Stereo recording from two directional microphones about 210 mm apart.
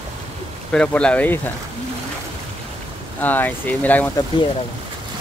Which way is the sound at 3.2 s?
10° left (ahead or behind).